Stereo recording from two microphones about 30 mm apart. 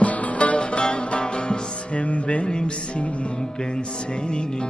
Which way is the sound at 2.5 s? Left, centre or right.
Left.